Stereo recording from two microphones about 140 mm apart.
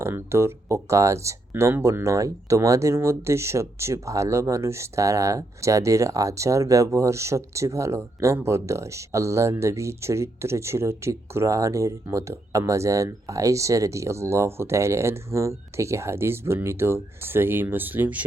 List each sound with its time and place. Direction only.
0.0 s speech: 20° right (ahead or behind)